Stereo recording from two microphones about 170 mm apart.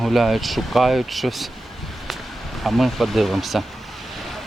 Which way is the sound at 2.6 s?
Centre (ahead or behind).